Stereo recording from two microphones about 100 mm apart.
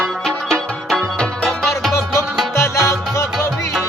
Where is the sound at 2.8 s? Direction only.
30° left (ahead or behind).